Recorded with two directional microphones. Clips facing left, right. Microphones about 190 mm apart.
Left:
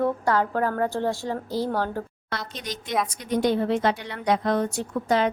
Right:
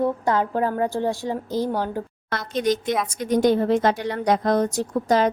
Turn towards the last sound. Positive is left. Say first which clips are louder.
# right 3 dB
turn(degrees=-40)  # may be behind; listen again after turning